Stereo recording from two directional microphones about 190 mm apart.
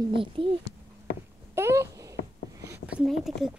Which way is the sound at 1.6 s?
15° right (ahead or behind).